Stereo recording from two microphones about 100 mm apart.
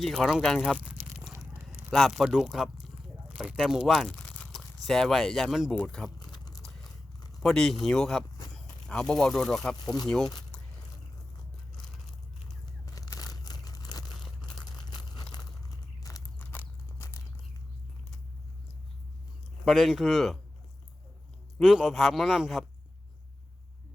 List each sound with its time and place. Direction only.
0.0 s speech: centre (ahead or behind)
4.1 s crunch: 10° left (ahead or behind)
4.5 s speech: 5° left (ahead or behind)
6.1 s a sound: 45° left (ahead or behind)
7.4 s speech: 5° left (ahead or behind)
12.6 s crumpling: 35° left (ahead or behind)
16.1 s a sound: 40° left (ahead or behind)
16.4 s a sound: 20° left (ahead or behind)
19.6 s speech: centre (ahead or behind)
21.6 s speech: 5° right (ahead or behind)